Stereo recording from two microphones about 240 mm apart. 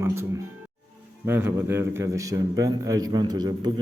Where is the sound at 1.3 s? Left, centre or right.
Centre.